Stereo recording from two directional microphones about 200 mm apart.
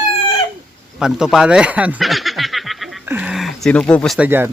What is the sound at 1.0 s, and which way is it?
Speech, 5° right (ahead or behind).